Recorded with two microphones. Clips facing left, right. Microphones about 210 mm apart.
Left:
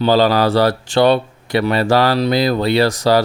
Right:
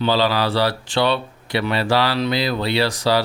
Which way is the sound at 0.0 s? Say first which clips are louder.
Left 6 dB; 45° left (ahead or behind).